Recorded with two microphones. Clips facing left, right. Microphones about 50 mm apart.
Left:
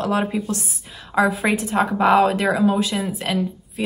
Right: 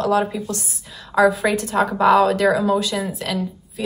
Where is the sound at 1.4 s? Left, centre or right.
Centre.